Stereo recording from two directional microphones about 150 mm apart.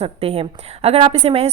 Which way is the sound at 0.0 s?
40° right (ahead or behind).